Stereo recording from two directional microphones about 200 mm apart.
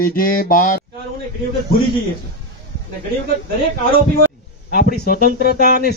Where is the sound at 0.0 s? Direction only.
45° left (ahead or behind).